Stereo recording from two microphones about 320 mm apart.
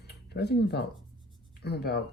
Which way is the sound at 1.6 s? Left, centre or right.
Left.